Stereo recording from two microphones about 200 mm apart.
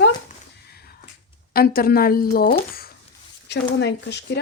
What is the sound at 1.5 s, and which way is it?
Speech, 50° left (ahead or behind).